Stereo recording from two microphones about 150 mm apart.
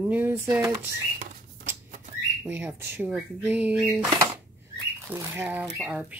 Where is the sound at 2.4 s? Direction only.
15° right (ahead or behind).